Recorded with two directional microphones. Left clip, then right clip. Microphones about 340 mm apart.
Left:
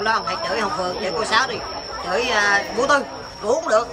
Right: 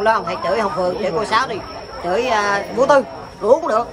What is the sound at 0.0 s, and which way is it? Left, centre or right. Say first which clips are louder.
A woman's voice: right 4 dB; centre.